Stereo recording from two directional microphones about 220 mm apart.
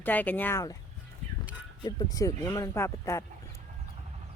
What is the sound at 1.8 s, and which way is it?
Speech, 20° left (ahead or behind).